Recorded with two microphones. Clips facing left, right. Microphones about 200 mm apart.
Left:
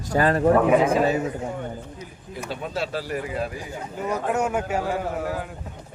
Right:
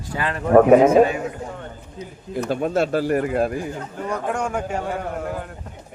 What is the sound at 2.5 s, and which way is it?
Speech, 50° right (ahead or behind).